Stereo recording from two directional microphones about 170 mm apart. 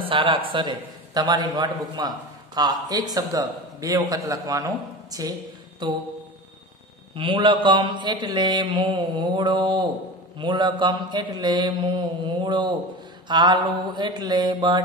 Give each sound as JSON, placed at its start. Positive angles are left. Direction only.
{"t": 0.0, "sound": "a man's voice", "side_deg": -30}
{"t": 7.2, "sound": "a man's voice", "side_deg": -30}